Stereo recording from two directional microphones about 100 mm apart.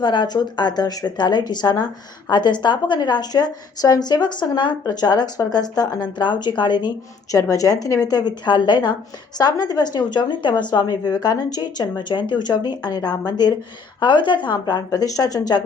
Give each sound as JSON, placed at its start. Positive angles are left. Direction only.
{"t": 0.0, "sound": "a woman's voice", "side_deg": 50}
{"t": 7.3, "sound": "a woman's voice", "side_deg": 35}
{"t": 14.8, "sound": "a woman's voice", "side_deg": 35}